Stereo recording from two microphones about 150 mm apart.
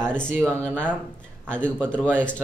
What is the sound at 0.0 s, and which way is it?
A man's voice, 5° left (ahead or behind).